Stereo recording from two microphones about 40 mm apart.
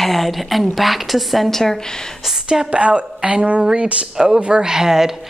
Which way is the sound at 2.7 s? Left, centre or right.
Right.